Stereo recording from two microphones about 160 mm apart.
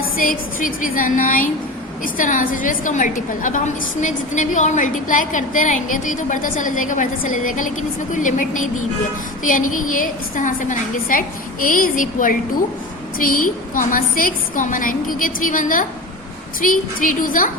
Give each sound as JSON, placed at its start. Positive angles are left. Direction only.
{"t": 0.0, "sound": "a woman's voice", "side_deg": 60}